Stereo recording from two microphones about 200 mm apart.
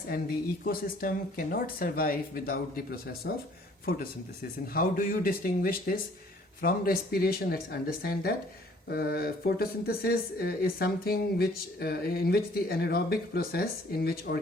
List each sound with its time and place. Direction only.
0.6 s speech: 45° left (ahead or behind)
4.7 s speech: 45° left (ahead or behind)